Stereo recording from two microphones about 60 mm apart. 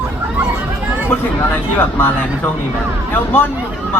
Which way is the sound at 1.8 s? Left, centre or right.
Left.